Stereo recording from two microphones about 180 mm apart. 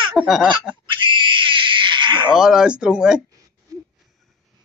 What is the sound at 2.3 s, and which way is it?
Speech, 5° right (ahead or behind).